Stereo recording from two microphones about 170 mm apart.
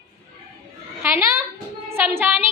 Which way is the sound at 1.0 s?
15° right (ahead or behind).